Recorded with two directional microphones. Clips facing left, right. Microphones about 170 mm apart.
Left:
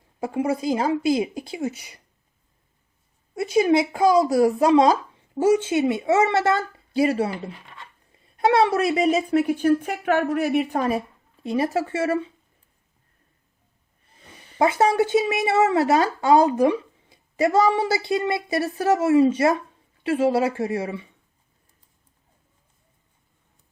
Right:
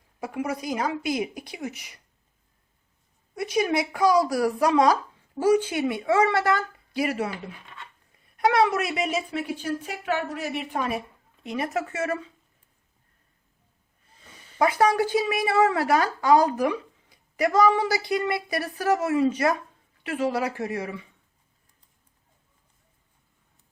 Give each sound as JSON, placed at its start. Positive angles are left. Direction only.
{"t": 0.2, "sound": "speech", "side_deg": 30}
{"t": 3.3, "sound": "a woman's voice", "side_deg": 25}
{"t": 14.6, "sound": "speech", "side_deg": 25}